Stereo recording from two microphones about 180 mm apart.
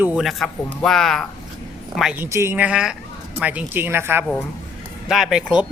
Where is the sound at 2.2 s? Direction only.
15° right (ahead or behind).